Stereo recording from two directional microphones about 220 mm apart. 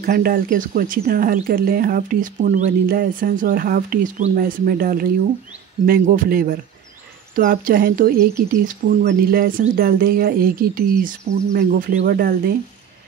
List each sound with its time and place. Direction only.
0.0 s speech: 45° right (ahead or behind)